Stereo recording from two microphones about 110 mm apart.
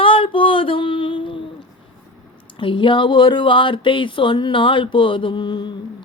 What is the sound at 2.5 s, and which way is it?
Music, 50° left (ahead or behind).